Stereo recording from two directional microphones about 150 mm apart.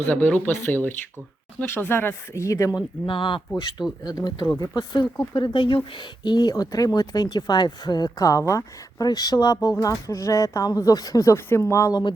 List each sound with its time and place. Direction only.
0.0 s speech: 10° left (ahead or behind)
3.1 s speech: 35° left (ahead or behind)